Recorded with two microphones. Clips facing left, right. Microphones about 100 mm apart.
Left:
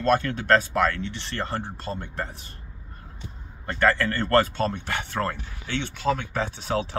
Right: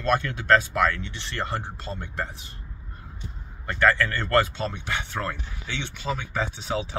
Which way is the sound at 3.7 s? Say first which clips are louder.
Even; 40° left (ahead or behind).